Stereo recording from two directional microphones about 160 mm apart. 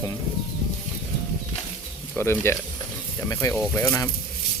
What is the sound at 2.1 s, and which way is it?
Speech, 15° left (ahead or behind).